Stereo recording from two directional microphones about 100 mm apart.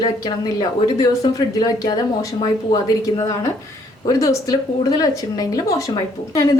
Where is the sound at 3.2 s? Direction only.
30° left (ahead or behind).